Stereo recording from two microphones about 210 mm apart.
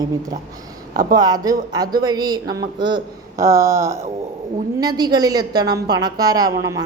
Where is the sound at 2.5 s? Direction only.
50° right (ahead or behind).